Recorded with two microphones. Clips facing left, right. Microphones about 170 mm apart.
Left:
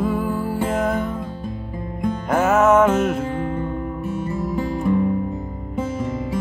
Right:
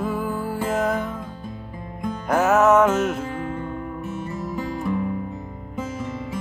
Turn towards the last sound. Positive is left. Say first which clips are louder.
# left 5 dB
turn(degrees=35)  # may be behind; listen again after turning